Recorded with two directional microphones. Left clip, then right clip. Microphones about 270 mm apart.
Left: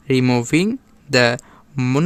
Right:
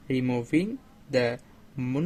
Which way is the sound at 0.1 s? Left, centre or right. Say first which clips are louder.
Left 10 dB; left.